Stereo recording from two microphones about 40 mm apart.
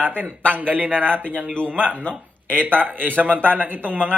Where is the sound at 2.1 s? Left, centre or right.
Left.